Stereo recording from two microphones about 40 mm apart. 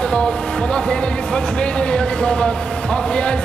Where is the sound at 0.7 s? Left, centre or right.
Left.